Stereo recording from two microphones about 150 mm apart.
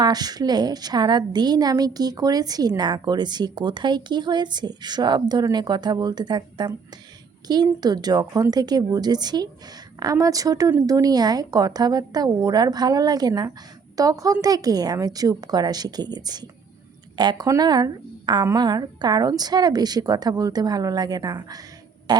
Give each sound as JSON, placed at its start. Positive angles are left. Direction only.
{"t": 0.0, "sound": "a woman's voice", "side_deg": -25}
{"t": 22.1, "sound": "fart", "side_deg": -30}